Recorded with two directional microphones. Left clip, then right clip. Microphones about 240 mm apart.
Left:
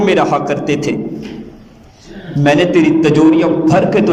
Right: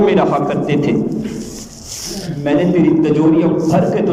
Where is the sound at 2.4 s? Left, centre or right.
Left.